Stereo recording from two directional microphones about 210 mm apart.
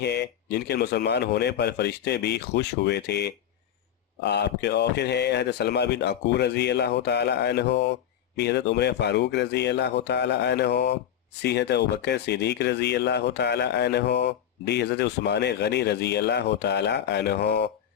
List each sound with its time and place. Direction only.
0.0 s speech: 55° left (ahead or behind)